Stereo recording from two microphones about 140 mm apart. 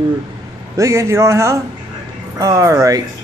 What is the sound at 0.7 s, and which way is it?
A man's voice, 20° right (ahead or behind).